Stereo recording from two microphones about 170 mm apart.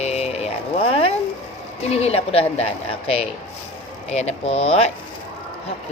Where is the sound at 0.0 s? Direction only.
40° left (ahead or behind).